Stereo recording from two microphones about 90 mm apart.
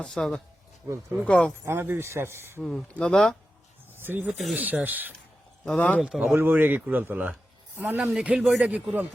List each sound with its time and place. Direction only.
0.0 s speech: 5° left (ahead or behind)
1.6 s speech: 25° right (ahead or behind)
2.6 s speech: 5° left (ahead or behind)
3.9 s snake: 25° right (ahead or behind)
4.5 s speech: 20° right (ahead or behind)
5.6 s speech: 15° left (ahead or behind)
6.0 s a man's voice: 5° right (ahead or behind)
6.3 s a man's voice: 20° right (ahead or behind)